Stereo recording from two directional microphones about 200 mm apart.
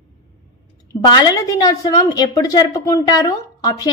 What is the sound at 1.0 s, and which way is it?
A woman's voice, 20° left (ahead or behind).